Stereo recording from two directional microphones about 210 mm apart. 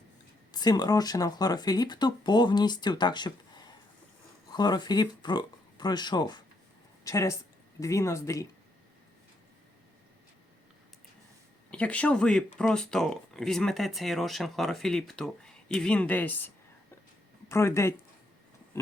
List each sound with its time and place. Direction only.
0.5 s a woman's voice: 20° left (ahead or behind)
11.7 s speech: 5° left (ahead or behind)
17.5 s speech: 15° left (ahead or behind)